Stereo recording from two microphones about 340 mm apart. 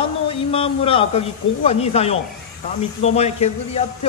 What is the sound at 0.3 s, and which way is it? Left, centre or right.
A man's voice, centre.